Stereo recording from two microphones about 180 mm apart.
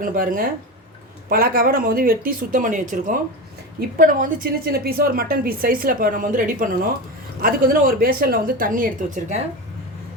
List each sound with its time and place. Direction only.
0.0 s a woman's voice: 50° right (ahead or behind)